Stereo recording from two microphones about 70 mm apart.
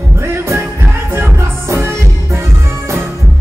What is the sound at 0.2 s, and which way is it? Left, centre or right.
Music, right.